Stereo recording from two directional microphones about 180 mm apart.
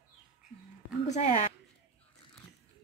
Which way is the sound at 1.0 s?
35° left (ahead or behind).